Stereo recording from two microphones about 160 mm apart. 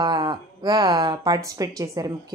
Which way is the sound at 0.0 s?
25° right (ahead or behind).